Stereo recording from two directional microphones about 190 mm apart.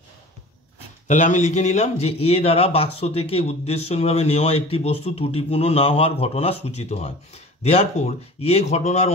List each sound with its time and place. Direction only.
1.0 s a man's voice: 40° left (ahead or behind)